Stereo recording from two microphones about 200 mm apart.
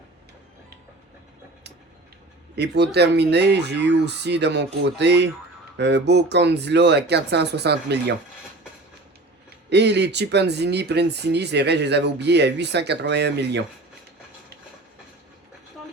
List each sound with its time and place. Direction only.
2.6 s speech: 55° right (ahead or behind)
9.6 s speech: 60° right (ahead or behind)